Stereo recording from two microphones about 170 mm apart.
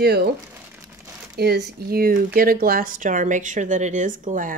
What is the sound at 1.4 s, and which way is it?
Speech, 70° right (ahead or behind).